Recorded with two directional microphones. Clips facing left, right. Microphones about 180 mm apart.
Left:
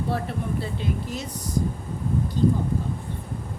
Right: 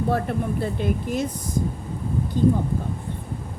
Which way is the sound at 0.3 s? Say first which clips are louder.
Right 4 dB; 50° right (ahead or behind).